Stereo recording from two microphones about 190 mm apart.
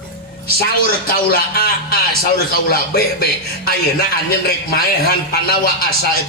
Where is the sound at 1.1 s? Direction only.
55° left (ahead or behind).